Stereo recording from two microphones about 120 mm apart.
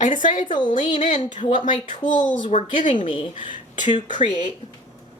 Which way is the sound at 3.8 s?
40° left (ahead or behind).